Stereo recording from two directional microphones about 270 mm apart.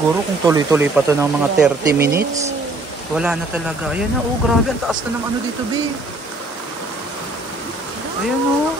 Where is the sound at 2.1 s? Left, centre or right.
Right.